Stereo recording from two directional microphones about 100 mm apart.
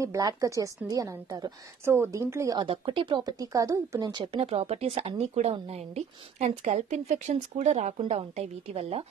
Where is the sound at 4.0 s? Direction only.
55° right (ahead or behind); by 6.5 s 90° right.